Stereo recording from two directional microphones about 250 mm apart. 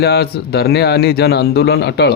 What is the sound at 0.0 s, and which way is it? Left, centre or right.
Speech, left.